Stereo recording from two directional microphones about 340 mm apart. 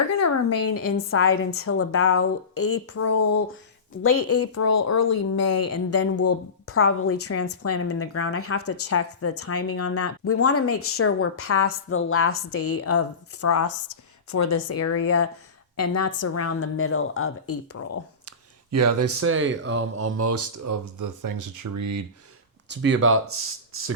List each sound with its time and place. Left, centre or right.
0.2 s speech: left
18.3 s speech: right
22.7 s speech: right